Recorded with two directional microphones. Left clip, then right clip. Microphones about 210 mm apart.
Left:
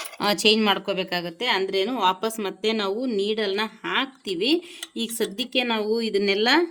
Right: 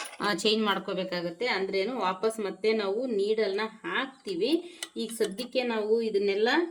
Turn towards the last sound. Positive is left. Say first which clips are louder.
# left 5 dB
turn(degrees=50)  # may be behind; listen again after turning